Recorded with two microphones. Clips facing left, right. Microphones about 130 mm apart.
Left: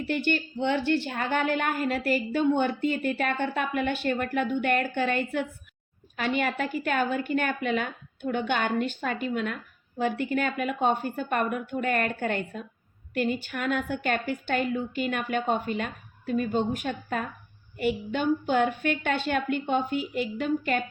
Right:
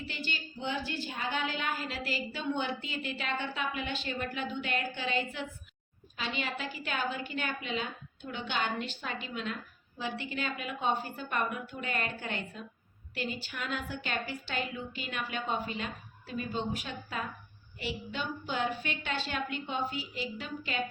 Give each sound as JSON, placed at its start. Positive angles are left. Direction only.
{"t": 0.0, "sound": "a woman's voice", "side_deg": 60}